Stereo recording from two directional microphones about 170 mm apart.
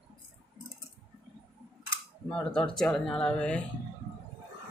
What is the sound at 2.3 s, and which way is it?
Speech, 5° left (ahead or behind).